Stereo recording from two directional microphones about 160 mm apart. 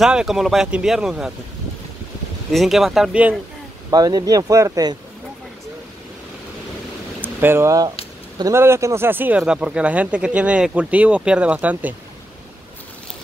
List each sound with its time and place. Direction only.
0.0 s speech: 5° right (ahead or behind)
2.5 s speech: centre (ahead or behind)
3.9 s speech: 25° right (ahead or behind)
7.2 s speech: 15° right (ahead or behind)